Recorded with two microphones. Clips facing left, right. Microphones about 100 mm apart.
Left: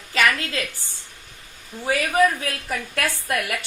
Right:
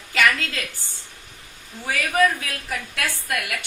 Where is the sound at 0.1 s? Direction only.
30° left (ahead or behind).